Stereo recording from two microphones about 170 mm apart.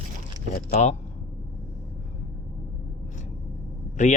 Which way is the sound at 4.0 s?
45° left (ahead or behind).